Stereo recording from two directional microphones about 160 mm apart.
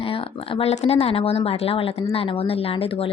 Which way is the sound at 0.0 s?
35° left (ahead or behind).